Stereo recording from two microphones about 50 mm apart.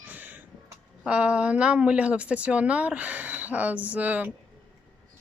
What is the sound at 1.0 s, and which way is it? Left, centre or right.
Speech, right.